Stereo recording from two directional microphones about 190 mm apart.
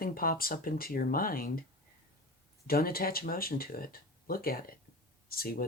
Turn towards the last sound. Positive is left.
turn(degrees=50)  # may be behind; listen again after turning